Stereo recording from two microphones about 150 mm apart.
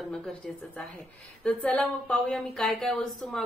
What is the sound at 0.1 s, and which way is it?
A woman's voice, 5° left (ahead or behind).